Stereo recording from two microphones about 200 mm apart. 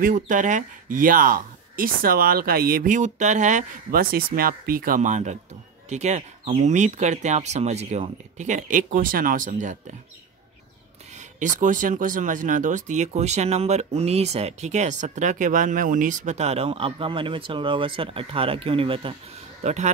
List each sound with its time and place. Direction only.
0.0 s speech: 40° right (ahead or behind)
11.1 s speech: 40° right (ahead or behind)